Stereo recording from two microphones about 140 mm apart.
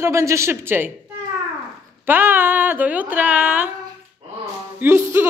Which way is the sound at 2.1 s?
15° right (ahead or behind).